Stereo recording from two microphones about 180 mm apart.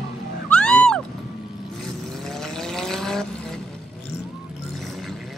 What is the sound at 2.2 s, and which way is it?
Vehicle, 5° left (ahead or behind).